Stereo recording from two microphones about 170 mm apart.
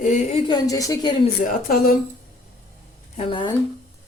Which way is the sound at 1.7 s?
60° left (ahead or behind).